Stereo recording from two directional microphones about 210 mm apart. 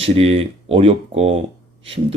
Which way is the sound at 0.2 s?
30° right (ahead or behind).